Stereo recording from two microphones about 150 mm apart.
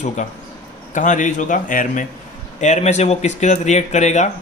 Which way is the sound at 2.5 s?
50° left (ahead or behind).